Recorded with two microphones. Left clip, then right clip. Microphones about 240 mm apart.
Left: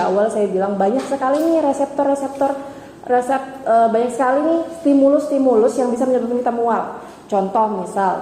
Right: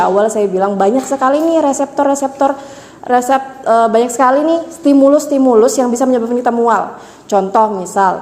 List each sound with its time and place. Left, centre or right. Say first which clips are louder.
0.0 s a woman's voice: right 5 dB; right